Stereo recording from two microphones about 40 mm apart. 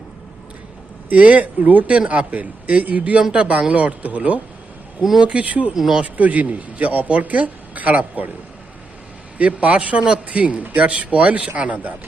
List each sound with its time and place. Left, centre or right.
1.1 s speech: right
3.2 s speech: right
5.7 s speech: centre
6.1 s speech: right
9.4 s speech: right